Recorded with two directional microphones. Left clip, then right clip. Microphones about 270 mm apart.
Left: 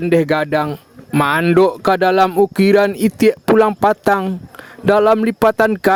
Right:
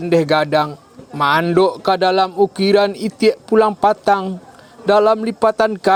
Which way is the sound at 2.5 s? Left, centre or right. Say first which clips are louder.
Left 1 dB; left.